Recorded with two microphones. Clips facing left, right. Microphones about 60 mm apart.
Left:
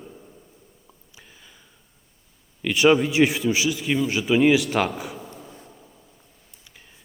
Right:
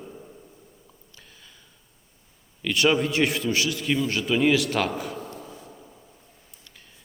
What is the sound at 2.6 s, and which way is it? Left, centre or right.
A man's voice, centre.